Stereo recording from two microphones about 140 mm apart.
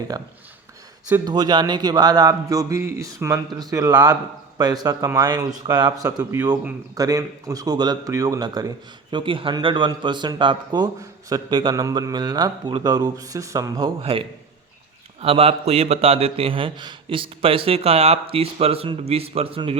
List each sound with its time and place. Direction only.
0.1 s a man's voice: 25° right (ahead or behind)
13.7 s a man's voice: 40° right (ahead or behind)